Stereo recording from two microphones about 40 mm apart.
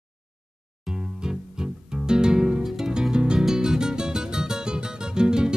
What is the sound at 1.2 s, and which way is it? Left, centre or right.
Music, centre.